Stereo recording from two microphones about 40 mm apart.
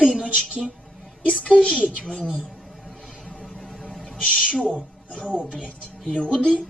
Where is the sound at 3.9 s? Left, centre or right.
Centre.